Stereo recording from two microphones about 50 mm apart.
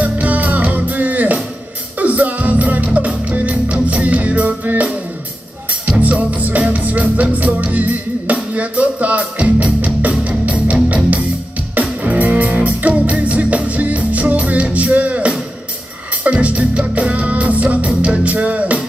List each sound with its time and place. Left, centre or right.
0.0 s music: right
5.9 s music: right